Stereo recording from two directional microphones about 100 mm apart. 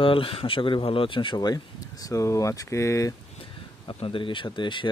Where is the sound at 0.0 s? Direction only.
60° left (ahead or behind); by 3.2 s 35° left (ahead or behind).